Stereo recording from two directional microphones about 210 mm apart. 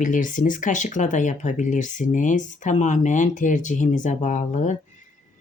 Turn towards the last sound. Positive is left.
turn(degrees=35)  # may be behind; listen again after turning